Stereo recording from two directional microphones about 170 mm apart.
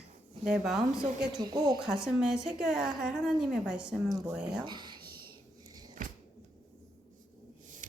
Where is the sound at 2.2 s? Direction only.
5° right (ahead or behind).